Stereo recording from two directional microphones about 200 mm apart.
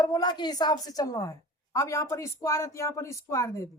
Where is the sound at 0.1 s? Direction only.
20° left (ahead or behind).